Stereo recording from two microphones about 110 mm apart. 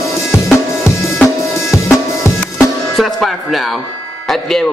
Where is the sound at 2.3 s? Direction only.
25° left (ahead or behind).